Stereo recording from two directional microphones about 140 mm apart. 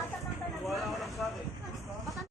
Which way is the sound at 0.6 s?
Centre (ahead or behind).